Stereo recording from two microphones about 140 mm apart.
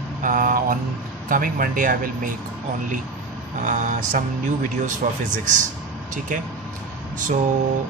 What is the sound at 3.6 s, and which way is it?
Speech, 65° right (ahead or behind).